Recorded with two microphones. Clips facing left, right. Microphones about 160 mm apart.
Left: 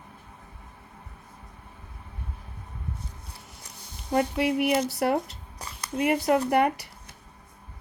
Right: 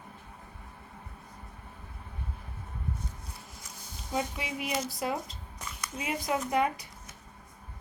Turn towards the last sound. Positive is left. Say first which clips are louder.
# left 6 dB
turn(degrees=70)  # may be behind; listen again after turning